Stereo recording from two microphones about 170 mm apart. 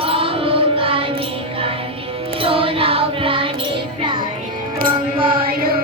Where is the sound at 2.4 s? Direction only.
30° right (ahead or behind).